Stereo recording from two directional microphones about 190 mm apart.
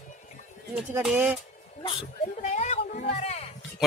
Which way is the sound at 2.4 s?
40° left (ahead or behind).